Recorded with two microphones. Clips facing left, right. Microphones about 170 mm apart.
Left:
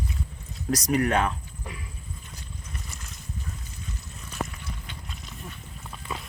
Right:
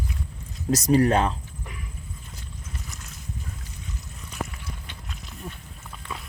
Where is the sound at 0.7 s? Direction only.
30° right (ahead or behind).